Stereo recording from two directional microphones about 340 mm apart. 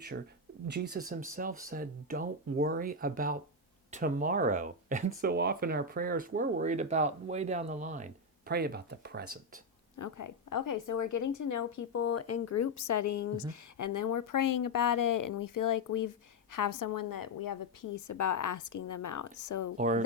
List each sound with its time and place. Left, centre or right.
0.7 s speech: right
10.0 s a woman's voice: left
19.7 s speech: right